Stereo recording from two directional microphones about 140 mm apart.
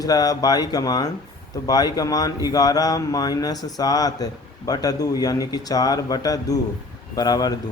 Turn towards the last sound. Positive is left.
turn(degrees=30)  # may be behind; listen again after turning